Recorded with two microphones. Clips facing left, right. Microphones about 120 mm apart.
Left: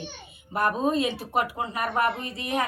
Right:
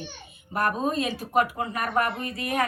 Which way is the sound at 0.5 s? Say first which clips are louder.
Left 1 dB; 20° left (ahead or behind).